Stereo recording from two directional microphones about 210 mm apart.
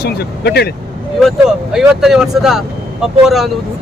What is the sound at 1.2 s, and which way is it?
Speech, centre (ahead or behind).